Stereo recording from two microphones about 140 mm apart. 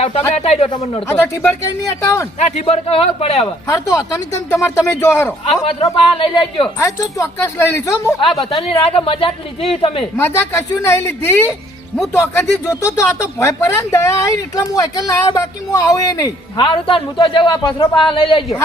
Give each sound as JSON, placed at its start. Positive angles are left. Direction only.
{"t": 0.0, "sound": "speech", "side_deg": 50}
{"t": 1.0, "sound": "speech", "side_deg": 20}
{"t": 2.6, "sound": "speech", "side_deg": 50}
{"t": 3.7, "sound": "speech", "side_deg": 25}
{"t": 5.6, "sound": "a woman's voice", "side_deg": 40}
{"t": 6.7, "sound": "speech", "side_deg": 20}
{"t": 8.4, "sound": "a woman's voice", "side_deg": 45}
{"t": 10.2, "sound": "speech", "side_deg": 15}
{"t": 16.6, "sound": "a woman's voice", "side_deg": 35}